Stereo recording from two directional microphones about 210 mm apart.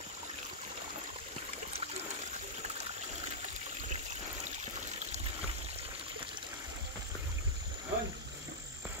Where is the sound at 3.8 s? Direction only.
35° right (ahead or behind).